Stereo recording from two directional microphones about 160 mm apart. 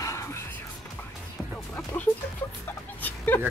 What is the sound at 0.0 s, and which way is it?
Music, 20° left (ahead or behind).